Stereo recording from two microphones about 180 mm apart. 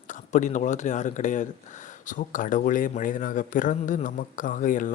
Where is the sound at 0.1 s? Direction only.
45° left (ahead or behind).